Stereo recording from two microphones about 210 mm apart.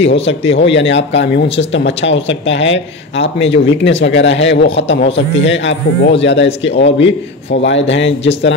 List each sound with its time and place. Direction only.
0.2 s a man's voice: 60° left (ahead or behind)